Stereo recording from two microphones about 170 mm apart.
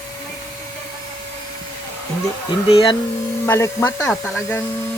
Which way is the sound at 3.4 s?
15° left (ahead or behind).